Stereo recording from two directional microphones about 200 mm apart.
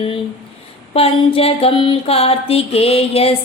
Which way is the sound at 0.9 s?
30° left (ahead or behind).